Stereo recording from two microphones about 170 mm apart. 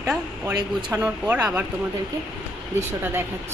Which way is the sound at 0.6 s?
25° right (ahead or behind).